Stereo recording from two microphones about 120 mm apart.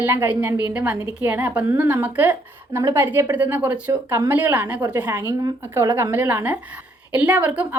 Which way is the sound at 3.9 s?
35° right (ahead or behind).